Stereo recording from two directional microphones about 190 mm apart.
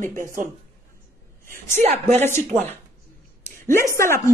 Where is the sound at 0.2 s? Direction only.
45° right (ahead or behind).